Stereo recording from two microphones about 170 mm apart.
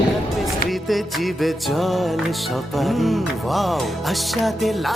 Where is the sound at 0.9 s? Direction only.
Centre (ahead or behind).